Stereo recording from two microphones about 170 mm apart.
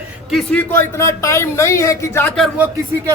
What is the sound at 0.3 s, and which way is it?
Speech, centre (ahead or behind).